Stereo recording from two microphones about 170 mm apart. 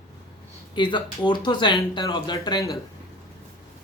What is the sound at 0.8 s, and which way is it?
Speech, 25° left (ahead or behind).